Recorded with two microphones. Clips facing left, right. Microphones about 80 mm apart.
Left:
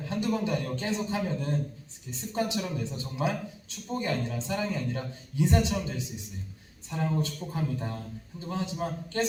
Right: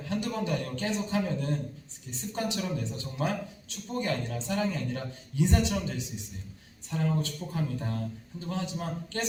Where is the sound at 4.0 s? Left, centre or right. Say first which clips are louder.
Even; left.